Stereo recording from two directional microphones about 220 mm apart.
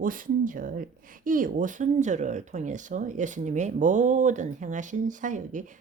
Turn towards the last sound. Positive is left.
turn(degrees=-35)  # may be behind; listen again after turning